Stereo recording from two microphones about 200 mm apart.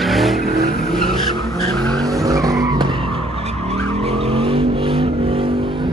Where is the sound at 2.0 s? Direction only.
15° right (ahead or behind).